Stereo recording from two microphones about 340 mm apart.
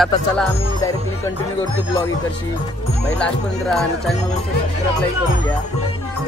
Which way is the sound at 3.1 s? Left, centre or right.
Centre.